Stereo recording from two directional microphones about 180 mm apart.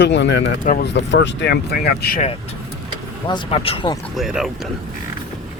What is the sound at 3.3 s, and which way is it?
Speech, 30° left (ahead or behind).